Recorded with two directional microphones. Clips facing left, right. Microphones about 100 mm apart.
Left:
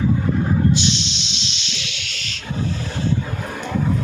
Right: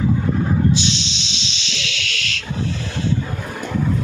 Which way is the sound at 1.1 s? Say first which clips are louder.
Right 1 dB; 90° right.